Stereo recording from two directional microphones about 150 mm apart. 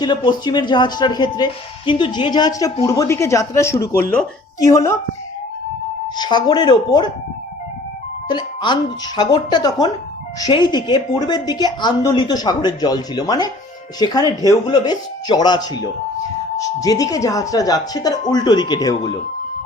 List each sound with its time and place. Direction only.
0.0 s a woman's voice: 30° left (ahead or behind); by 4.3 s 10° left (ahead or behind)
4.6 s a woman's voice: 20° left (ahead or behind)
6.1 s a woman's voice: 30° left (ahead or behind)
8.3 s a woman's voice: 30° left (ahead or behind)